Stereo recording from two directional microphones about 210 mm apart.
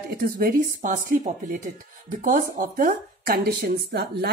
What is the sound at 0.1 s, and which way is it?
Speech, 45° right (ahead or behind).